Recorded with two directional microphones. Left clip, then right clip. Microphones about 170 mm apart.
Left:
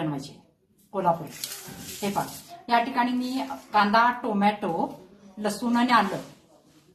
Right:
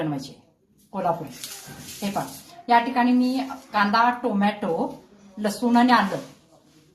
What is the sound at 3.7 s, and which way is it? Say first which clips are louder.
A woman's voice: even; 15° right (ahead or behind).